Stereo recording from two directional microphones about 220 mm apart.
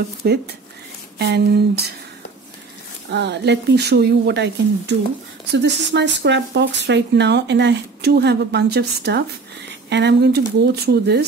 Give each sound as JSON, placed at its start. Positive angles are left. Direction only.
{"t": 0.2, "sound": "speech", "side_deg": -45}
{"t": 3.1, "sound": "speech", "side_deg": -50}